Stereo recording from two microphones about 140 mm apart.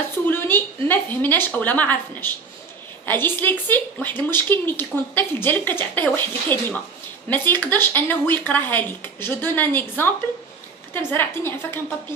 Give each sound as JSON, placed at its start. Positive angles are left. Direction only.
{"t": 0.3, "sound": "a woman's voice", "side_deg": 15}
{"t": 10.9, "sound": "a woman's voice", "side_deg": 15}